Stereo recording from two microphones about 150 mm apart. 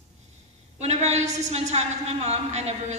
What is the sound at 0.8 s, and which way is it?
A woman's voice, 45° right (ahead or behind).